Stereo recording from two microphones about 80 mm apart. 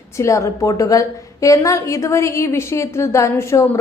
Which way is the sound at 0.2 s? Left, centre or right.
Left.